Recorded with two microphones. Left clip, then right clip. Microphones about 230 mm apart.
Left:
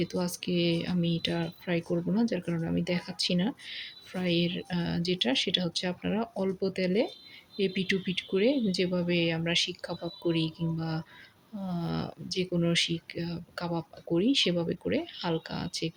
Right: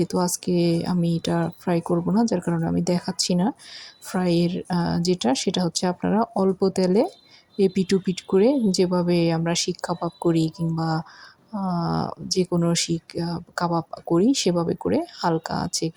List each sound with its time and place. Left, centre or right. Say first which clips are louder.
0.3 s speech: right 7 dB; right
9.8 s speech: right 10 dB; centre
10.2 s speech: right 7 dB; right
12.5 s speech: right 6 dB; centre
12.7 s speech: right 3 dB; right